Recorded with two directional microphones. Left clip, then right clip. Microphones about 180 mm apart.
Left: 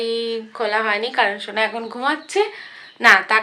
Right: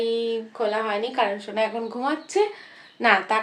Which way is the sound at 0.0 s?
5° left (ahead or behind).